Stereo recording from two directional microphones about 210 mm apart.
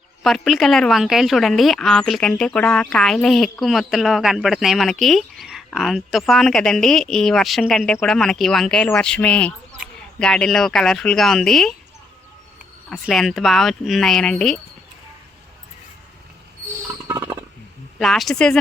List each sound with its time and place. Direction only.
0.2 s a woman's voice: centre (ahead or behind)
12.9 s a woman's voice: centre (ahead or behind)
17.1 s a sound: 15° right (ahead or behind)
18.0 s a woman's voice: centre (ahead or behind)